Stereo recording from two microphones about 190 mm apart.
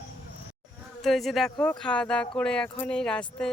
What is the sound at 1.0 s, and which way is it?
Speech, centre (ahead or behind).